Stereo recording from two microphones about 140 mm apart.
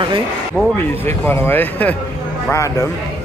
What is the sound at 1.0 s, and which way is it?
Speech, 15° left (ahead or behind).